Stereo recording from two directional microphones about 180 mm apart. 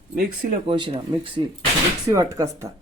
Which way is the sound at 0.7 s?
25° right (ahead or behind).